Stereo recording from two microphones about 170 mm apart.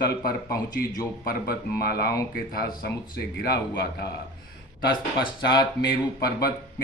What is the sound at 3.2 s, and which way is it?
Speech, 70° left (ahead or behind).